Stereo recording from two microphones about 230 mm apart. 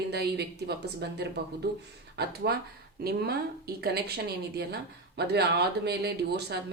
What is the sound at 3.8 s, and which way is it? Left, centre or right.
Speech, right.